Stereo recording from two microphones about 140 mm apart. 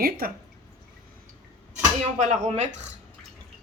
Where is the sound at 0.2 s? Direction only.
90° right.